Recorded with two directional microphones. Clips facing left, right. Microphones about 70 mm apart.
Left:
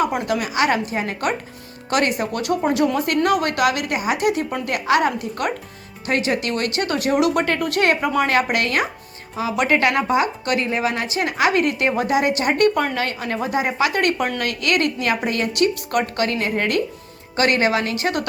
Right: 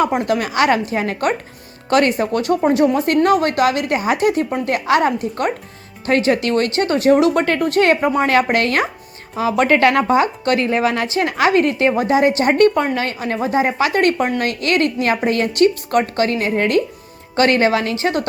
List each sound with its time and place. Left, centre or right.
0.0 s a woman's voice: right